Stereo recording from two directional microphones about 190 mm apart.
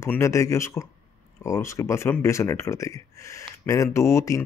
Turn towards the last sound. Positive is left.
turn(degrees=15)  # may be behind; listen again after turning